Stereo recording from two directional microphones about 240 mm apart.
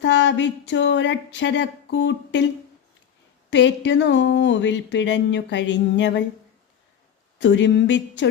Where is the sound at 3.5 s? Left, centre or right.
Left.